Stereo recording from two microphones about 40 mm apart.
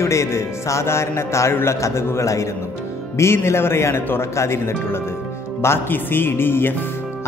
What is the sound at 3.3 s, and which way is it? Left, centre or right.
Speech, left.